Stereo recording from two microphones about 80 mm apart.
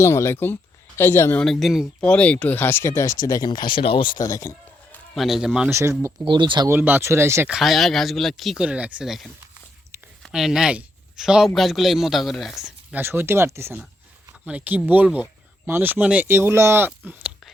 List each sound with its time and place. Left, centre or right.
0.0 s speech: left
1.4 s a man's voice: centre
2.0 s speech: centre; by 4.2 s left
4.2 s speech: left
5.1 s a man's voice: centre
5.6 s speech: right
6.2 s speech: right
6.7 s speech: right
7.6 s a man's voice: centre
8.5 s speech: centre
10.2 s a man's voice: centre
12.9 s speech: right
14.4 s speech: centre